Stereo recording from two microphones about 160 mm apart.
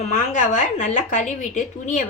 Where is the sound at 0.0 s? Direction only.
50° left (ahead or behind).